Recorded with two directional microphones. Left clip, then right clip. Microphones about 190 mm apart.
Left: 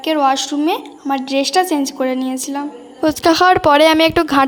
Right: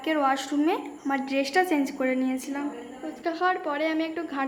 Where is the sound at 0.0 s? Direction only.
35° left (ahead or behind).